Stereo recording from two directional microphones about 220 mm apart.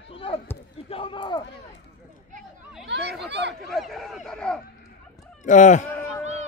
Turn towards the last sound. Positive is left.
turn(degrees=-30)  # may be behind; listen again after turning